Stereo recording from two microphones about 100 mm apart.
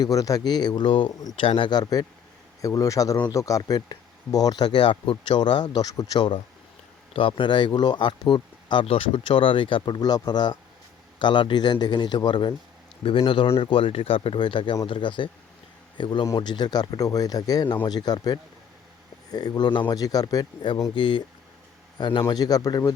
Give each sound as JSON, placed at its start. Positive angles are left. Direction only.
{"t": 0.0, "sound": "speech", "side_deg": 35}
{"t": 6.1, "sound": "speech", "side_deg": 50}
{"t": 13.0, "sound": "speech", "side_deg": 65}
{"t": 16.2, "sound": "speech", "side_deg": 40}
{"t": 19.9, "sound": "a man's voice", "side_deg": 40}